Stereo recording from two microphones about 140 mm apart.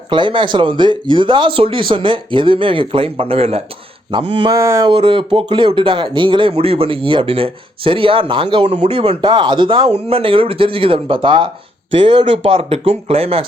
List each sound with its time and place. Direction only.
0.1 s speech: 35° right (ahead or behind)
4.5 s a sound: 20° right (ahead or behind)
4.9 s speech: 40° right (ahead or behind)